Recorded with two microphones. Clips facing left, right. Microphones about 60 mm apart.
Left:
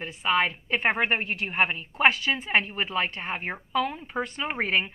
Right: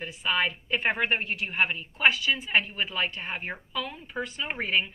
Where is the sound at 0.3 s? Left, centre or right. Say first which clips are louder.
Left 2 dB; left.